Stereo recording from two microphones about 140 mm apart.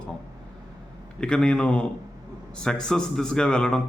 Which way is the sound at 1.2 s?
5° left (ahead or behind).